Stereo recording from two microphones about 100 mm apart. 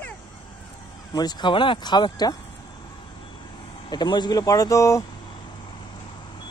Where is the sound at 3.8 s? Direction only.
50° left (ahead or behind).